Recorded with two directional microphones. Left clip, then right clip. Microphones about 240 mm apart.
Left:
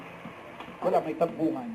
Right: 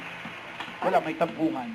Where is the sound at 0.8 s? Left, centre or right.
Centre.